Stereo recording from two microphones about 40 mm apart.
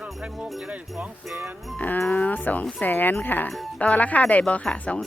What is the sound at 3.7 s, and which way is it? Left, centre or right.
Speech, left.